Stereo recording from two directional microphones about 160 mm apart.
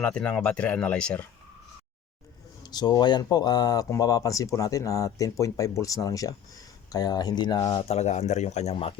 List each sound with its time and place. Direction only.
0.0 s speech: 5° left (ahead or behind)
2.6 s speech: 25° left (ahead or behind)